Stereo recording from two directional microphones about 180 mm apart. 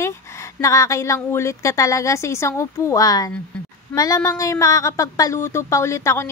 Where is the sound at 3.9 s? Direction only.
5° left (ahead or behind).